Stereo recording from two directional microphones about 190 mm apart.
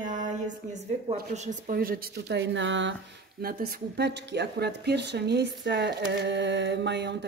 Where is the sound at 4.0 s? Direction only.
60° right (ahead or behind).